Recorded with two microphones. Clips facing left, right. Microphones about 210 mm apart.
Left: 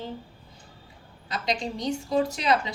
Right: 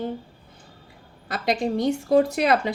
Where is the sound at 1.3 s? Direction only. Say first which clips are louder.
Right 6 dB; 55° right (ahead or behind).